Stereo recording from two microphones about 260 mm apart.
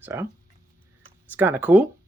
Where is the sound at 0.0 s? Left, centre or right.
Centre.